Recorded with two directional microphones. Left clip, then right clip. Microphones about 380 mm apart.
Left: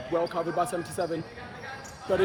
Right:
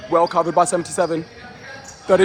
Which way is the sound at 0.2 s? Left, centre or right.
Centre.